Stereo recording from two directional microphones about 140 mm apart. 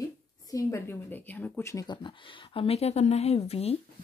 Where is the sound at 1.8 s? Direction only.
35° left (ahead or behind).